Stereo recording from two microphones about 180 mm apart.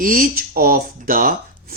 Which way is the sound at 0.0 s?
50° right (ahead or behind).